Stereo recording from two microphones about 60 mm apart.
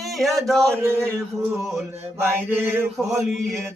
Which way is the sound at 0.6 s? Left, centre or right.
Right.